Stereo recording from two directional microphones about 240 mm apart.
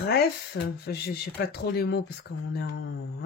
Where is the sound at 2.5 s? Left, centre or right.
Left.